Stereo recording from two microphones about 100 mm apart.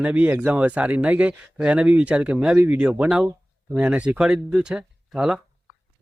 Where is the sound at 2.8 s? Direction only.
15° right (ahead or behind).